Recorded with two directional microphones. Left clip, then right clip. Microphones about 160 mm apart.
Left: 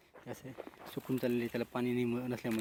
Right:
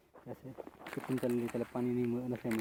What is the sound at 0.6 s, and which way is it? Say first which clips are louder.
Speech: even; 35° left (ahead or behind).